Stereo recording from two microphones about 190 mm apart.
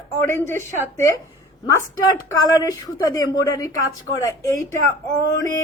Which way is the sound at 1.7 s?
15° left (ahead or behind).